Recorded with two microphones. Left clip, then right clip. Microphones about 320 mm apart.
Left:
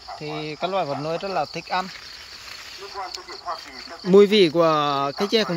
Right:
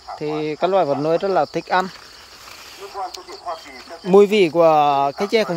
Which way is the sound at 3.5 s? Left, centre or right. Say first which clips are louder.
Right 2 dB; right.